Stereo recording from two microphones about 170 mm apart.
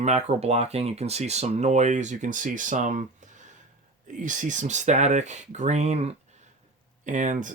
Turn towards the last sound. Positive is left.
turn(degrees=-45)  # may be behind; listen again after turning